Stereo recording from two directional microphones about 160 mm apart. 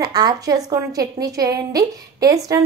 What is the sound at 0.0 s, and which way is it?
A woman's voice, 25° right (ahead or behind).